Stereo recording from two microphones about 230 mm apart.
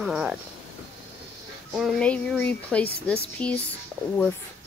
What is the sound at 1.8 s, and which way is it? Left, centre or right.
Speech, centre.